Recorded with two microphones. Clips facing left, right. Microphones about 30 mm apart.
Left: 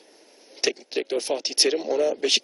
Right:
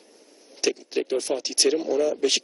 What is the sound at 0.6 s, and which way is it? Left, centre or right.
A man's voice, left.